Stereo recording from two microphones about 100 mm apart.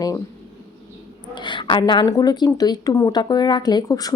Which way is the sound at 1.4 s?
55° left (ahead or behind).